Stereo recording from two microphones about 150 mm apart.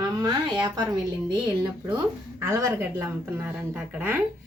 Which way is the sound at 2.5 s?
20° right (ahead or behind).